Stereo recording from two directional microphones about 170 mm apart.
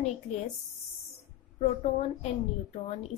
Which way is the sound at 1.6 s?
40° left (ahead or behind).